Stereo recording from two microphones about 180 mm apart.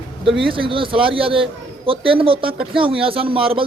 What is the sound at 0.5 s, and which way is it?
Speech, 30° right (ahead or behind).